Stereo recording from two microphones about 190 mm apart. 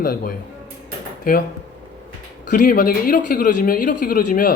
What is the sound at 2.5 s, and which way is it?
Speech, 45° left (ahead or behind).